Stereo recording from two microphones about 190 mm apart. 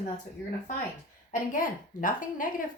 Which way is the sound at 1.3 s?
45° left (ahead or behind).